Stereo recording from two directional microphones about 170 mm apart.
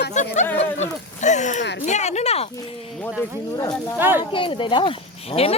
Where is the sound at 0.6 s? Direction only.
45° left (ahead or behind).